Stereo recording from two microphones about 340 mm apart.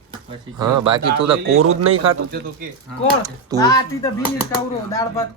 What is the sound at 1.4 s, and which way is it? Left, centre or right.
Speech, right.